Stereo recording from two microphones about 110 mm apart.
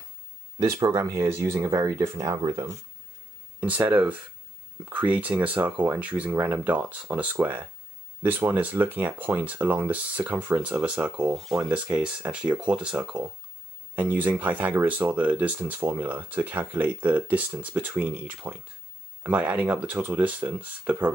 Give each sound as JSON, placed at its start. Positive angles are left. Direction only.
{"t": 0.6, "sound": "speech", "side_deg": -35}
{"t": 3.6, "sound": "speech", "side_deg": -15}